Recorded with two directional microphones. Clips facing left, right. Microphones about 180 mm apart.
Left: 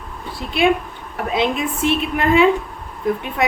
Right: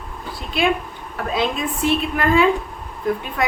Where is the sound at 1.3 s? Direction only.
25° left (ahead or behind).